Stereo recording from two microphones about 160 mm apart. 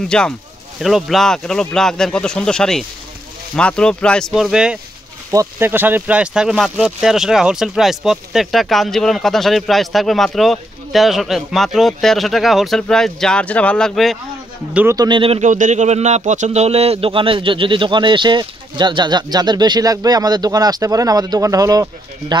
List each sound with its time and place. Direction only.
0.1 s speech: 5° left (ahead or behind)
5.3 s speech: 20° right (ahead or behind); by 14.1 s centre (ahead or behind)
14.7 s speech: 10° right (ahead or behind)
15.0 s speech: 30° right (ahead or behind)
15.4 s speech: 50° right (ahead or behind); by 21.8 s 20° right (ahead or behind)